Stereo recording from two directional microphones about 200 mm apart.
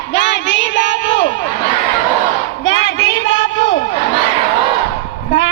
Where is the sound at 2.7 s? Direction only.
65° left (ahead or behind).